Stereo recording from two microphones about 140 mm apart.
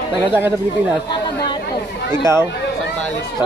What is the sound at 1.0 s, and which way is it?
Chatter, 30° left (ahead or behind).